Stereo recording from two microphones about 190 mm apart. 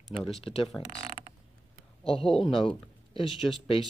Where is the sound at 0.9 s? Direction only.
30° left (ahead or behind).